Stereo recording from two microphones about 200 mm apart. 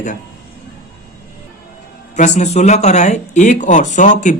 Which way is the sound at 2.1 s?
35° left (ahead or behind).